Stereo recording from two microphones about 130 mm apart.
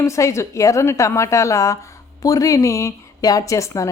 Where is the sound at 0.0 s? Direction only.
25° left (ahead or behind).